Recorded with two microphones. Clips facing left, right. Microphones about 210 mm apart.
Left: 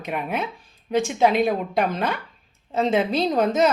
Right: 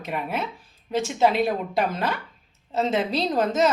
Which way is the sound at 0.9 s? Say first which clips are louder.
Left 2 dB; 5° right (ahead or behind).